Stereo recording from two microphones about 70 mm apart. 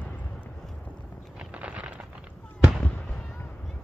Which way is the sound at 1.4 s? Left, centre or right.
Centre.